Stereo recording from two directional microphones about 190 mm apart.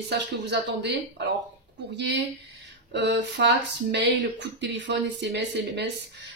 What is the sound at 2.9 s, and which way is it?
Speech, 65° right (ahead or behind).